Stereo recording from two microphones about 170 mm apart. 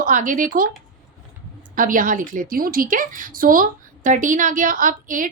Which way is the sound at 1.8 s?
50° right (ahead or behind).